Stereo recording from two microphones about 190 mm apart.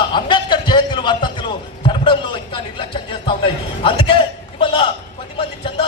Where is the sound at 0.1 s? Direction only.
25° left (ahead or behind).